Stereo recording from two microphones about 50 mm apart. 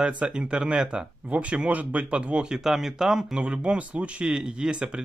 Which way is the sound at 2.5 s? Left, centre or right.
Centre.